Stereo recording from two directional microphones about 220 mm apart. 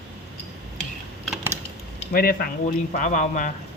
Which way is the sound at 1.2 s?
5° right (ahead or behind).